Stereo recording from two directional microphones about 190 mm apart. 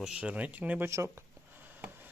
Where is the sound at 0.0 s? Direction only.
5° right (ahead or behind).